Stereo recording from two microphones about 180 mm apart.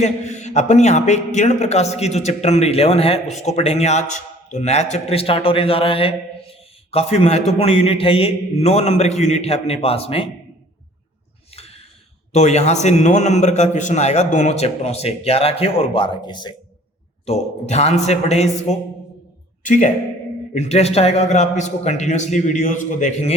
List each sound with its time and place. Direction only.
0.0 s a man's voice: 40° left (ahead or behind)
12.3 s a man's voice: 40° left (ahead or behind)
17.2 s a man's voice: 35° left (ahead or behind)